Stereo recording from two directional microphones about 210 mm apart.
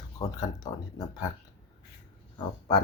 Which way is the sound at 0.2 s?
20° left (ahead or behind).